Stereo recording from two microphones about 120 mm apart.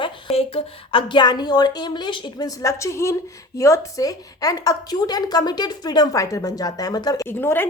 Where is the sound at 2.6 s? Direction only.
25° left (ahead or behind).